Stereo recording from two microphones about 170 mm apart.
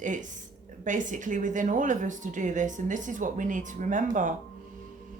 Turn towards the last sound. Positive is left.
turn(degrees=-50)  # may be behind; listen again after turning